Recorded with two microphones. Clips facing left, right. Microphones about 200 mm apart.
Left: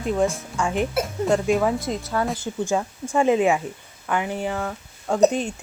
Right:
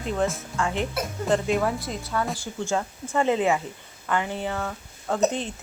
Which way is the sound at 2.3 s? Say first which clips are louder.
Left 3 dB; 20° left (ahead or behind).